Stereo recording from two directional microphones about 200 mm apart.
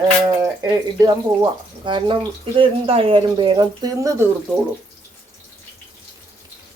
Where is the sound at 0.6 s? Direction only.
20° right (ahead or behind).